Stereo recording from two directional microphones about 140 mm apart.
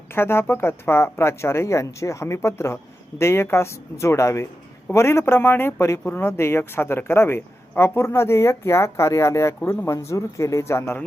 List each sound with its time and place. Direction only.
0.1 s speech: 15° left (ahead or behind)